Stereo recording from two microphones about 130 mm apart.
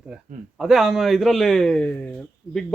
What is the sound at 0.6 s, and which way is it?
Speech, centre (ahead or behind).